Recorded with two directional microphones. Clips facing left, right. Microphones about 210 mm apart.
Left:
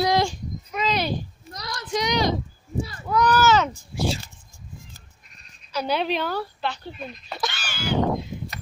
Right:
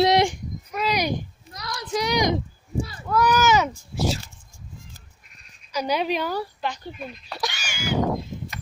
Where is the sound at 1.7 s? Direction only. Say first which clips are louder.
Even; 10° right (ahead or behind).